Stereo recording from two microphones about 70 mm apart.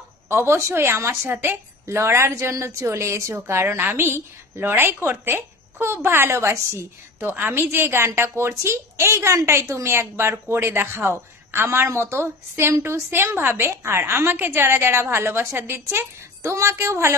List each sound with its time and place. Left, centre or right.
0.3 s a woman's voice: right
7.2 s a woman's voice: right